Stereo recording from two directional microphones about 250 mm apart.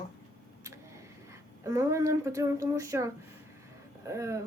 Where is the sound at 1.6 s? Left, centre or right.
Centre.